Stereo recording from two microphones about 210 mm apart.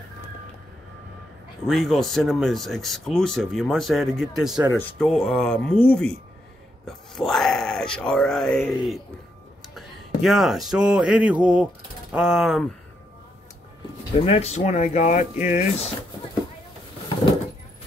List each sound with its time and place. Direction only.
1.7 s speech: centre (ahead or behind)
9.8 s a sound: centre (ahead or behind)
14.1 s speech: 25° left (ahead or behind)